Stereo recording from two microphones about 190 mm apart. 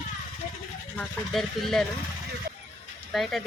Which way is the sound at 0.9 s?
Centre (ahead or behind).